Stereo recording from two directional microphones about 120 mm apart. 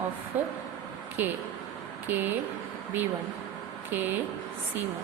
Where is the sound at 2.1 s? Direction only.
15° right (ahead or behind).